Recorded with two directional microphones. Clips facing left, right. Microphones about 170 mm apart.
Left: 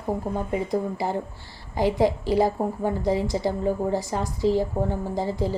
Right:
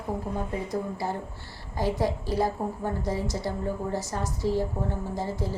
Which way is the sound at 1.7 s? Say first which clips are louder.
Left 5 dB; 15° left (ahead or behind).